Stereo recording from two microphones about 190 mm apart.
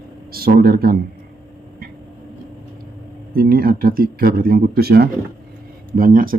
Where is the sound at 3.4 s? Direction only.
50° right (ahead or behind).